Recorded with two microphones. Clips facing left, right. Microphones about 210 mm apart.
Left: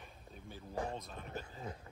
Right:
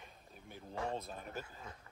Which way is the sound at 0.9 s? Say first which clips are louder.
Right 3 dB; 30° right (ahead or behind).